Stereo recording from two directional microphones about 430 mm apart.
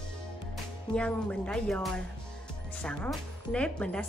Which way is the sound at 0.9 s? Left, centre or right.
Centre.